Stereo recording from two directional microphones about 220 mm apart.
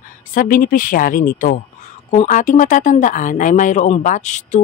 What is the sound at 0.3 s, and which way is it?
Speech, 40° left (ahead or behind).